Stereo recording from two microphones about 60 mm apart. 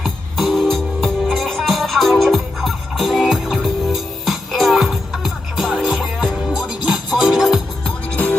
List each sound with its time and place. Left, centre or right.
0.0 s music: centre
8.1 s music: left